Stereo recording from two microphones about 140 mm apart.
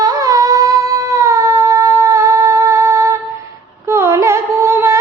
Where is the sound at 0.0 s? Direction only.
25° right (ahead or behind).